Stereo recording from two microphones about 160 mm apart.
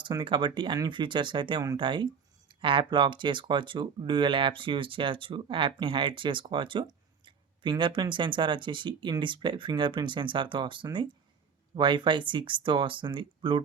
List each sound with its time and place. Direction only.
0.0 s speech: 30° right (ahead or behind)